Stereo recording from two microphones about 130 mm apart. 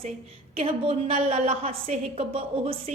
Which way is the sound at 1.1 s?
60° right (ahead or behind).